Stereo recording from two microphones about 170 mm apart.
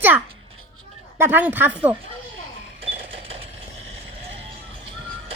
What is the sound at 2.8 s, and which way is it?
Sewing machine, 35° right (ahead or behind).